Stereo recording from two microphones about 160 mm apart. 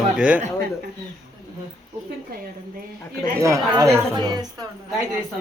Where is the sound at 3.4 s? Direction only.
20° right (ahead or behind).